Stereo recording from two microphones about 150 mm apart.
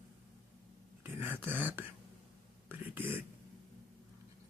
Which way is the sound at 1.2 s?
15° right (ahead or behind).